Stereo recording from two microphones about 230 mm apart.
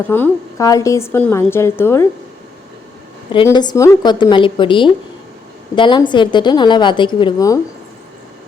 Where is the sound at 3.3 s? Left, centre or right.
Centre.